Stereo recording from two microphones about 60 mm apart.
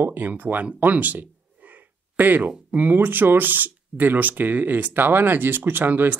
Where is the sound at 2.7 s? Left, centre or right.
Right.